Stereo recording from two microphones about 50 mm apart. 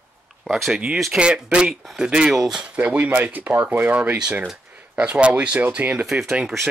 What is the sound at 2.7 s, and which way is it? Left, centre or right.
Speech, right.